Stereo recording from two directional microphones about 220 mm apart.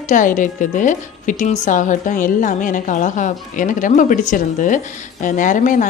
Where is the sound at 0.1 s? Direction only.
35° left (ahead or behind).